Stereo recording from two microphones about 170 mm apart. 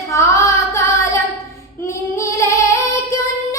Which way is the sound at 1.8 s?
15° left (ahead or behind).